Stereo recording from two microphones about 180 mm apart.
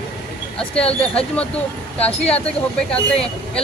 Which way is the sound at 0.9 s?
5° left (ahead or behind).